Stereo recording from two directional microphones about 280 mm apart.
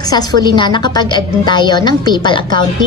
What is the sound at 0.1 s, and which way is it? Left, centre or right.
A woman's voice, centre.